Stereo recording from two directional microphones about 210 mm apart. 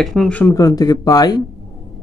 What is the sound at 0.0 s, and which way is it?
Speech, centre (ahead or behind).